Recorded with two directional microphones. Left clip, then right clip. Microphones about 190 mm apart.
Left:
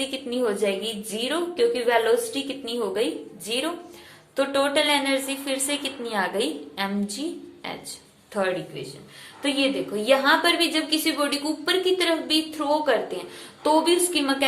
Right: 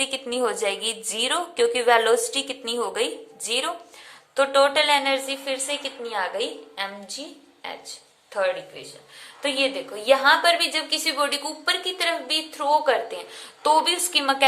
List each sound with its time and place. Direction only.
0.0 s a woman's voice: 30° right (ahead or behind); by 6.9 s 10° right (ahead or behind)
8.3 s a woman's voice: 10° right (ahead or behind)